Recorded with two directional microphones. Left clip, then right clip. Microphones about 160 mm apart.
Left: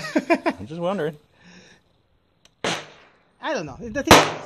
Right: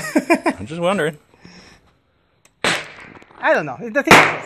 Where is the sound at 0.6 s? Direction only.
5° right (ahead or behind).